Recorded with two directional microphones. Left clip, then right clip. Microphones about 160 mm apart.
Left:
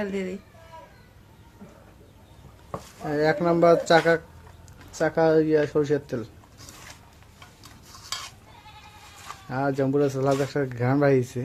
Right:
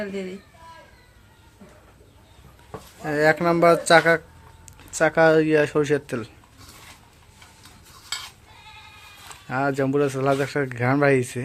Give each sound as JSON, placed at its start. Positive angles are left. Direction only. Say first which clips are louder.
{"t": 3.1, "sound": "speech", "louder": "right 3 dB", "side_deg": -10}
{"t": 9.5, "sound": "speech", "louder": "right 2 dB", "side_deg": -10}